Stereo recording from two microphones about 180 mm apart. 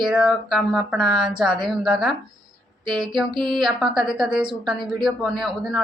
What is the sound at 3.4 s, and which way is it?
A woman's voice, centre (ahead or behind).